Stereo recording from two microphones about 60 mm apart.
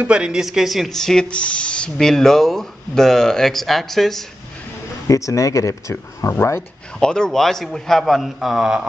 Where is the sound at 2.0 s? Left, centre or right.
Centre.